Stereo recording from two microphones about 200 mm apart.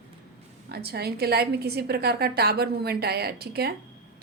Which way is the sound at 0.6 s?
55° right (ahead or behind).